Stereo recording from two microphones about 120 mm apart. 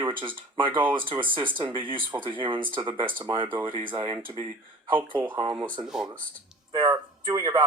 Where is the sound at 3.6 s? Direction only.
45° right (ahead or behind).